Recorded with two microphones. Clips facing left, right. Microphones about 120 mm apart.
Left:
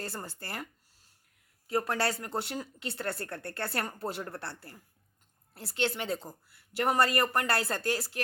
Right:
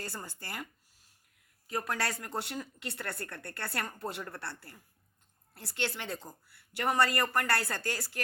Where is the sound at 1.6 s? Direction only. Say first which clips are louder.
Left 4 dB; 30° left (ahead or behind).